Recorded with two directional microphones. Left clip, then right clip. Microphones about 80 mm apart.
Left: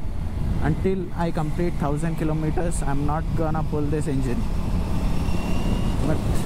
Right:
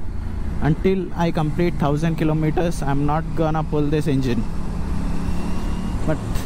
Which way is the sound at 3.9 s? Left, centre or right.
Right.